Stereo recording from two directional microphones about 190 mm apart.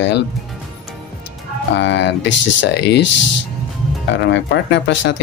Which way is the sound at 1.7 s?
70° left (ahead or behind).